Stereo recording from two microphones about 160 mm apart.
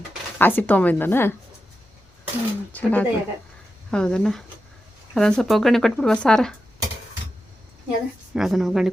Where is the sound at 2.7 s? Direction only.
10° left (ahead or behind).